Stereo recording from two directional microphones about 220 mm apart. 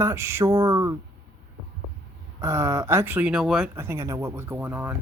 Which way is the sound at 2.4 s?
15° right (ahead or behind).